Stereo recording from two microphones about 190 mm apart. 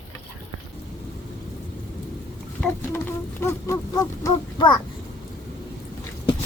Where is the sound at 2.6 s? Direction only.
10° left (ahead or behind).